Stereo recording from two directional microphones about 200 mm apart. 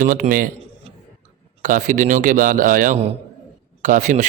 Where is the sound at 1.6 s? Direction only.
40° right (ahead or behind).